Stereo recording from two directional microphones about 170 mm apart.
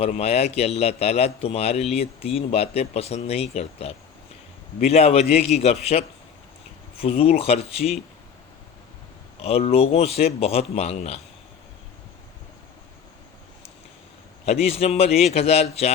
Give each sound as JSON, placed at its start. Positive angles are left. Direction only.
{"t": 0.0, "sound": "a man's voice", "side_deg": 35}
{"t": 9.4, "sound": "a man's voice", "side_deg": 35}
{"t": 14.4, "sound": "a man's voice", "side_deg": 40}